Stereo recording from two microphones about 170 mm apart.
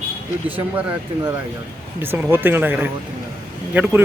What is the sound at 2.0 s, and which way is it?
Speech, 10° right (ahead or behind).